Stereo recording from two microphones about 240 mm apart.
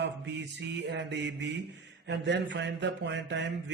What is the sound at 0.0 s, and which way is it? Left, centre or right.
Mantra, right.